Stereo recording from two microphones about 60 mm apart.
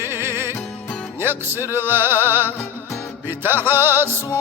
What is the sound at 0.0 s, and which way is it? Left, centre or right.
Music, right.